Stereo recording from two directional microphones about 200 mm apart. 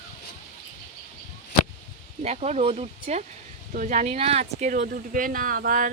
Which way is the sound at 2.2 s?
35° right (ahead or behind).